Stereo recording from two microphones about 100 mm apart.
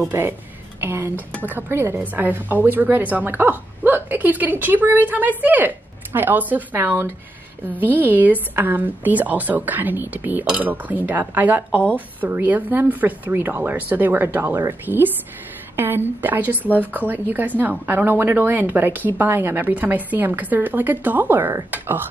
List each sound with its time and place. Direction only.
0.1 s a woman's voice: 20° right (ahead or behind)
11.7 s speech: 15° left (ahead or behind)
12.2 s a woman's voice: 20° right (ahead or behind)